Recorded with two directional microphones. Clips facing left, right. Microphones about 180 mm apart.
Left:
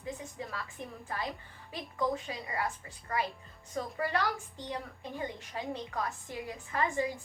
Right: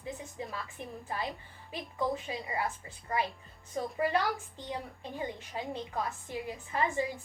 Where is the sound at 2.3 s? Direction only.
20° right (ahead or behind).